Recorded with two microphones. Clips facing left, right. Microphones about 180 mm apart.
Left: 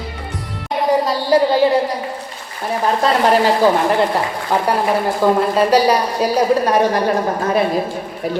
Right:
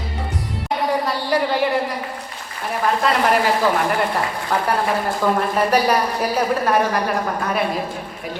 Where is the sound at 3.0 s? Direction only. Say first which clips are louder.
Left 5 dB; 30° left (ahead or behind).